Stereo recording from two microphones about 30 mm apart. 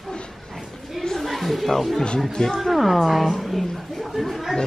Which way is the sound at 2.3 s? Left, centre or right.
Left.